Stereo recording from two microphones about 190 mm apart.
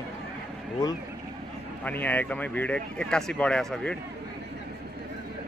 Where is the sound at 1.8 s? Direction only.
10° left (ahead or behind).